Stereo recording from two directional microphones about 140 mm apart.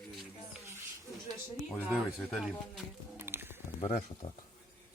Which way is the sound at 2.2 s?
Centre (ahead or behind).